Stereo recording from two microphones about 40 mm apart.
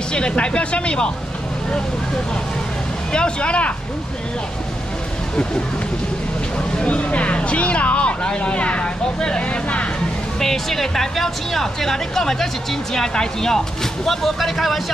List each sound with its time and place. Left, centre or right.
0.1 s speech: left
3.1 s speech: left
6.8 s speech: left
10.4 s speech: centre
14.0 s speech: centre